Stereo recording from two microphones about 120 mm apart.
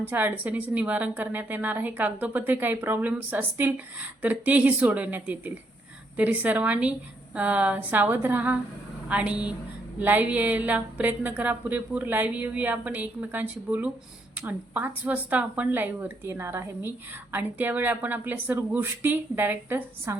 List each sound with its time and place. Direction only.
0.0 s speech: 15° right (ahead or behind)